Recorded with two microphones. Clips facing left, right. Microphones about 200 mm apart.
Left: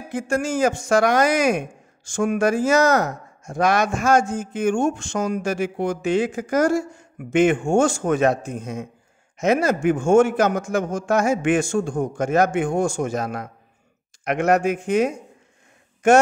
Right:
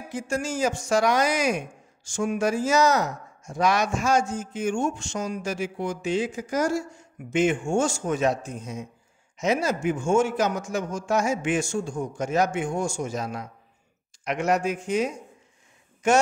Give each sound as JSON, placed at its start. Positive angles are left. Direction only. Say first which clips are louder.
{"t": 0.1, "sound": "speech", "louder": "left 6 dB", "side_deg": 55}